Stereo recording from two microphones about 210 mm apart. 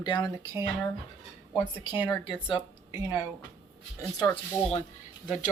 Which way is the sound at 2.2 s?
25° left (ahead or behind).